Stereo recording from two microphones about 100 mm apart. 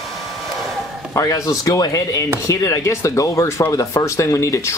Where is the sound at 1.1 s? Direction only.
30° left (ahead or behind).